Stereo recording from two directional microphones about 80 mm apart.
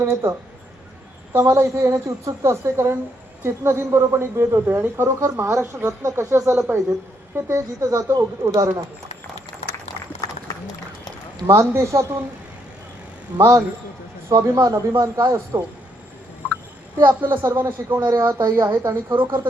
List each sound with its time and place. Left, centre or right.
0.0 s speech: right
11.4 s speech: right
13.3 s speech: right
17.0 s a woman's voice: right
19.1 s speech: right